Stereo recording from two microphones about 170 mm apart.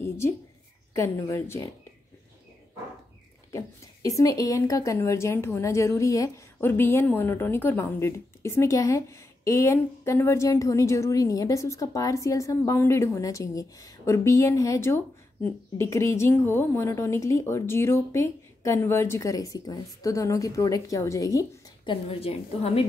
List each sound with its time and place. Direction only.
0.9 s speech: 15° left (ahead or behind)
3.5 s speech: 20° left (ahead or behind)
22.1 s a woman's voice: 35° left (ahead or behind)